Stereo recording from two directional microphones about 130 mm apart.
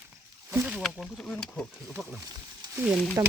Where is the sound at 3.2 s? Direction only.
25° right (ahead or behind).